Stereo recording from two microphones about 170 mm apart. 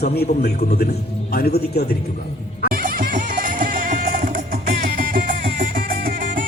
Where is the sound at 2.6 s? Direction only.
55° right (ahead or behind).